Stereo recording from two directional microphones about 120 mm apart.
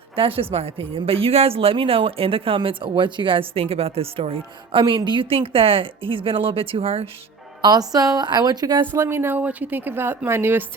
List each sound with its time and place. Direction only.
0.2 s a woman's voice: 50° right (ahead or behind)
7.6 s a woman's voice: 35° right (ahead or behind)
8.9 s speech: 20° right (ahead or behind)